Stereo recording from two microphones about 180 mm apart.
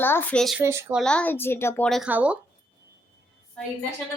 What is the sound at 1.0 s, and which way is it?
Speech, 5° left (ahead or behind).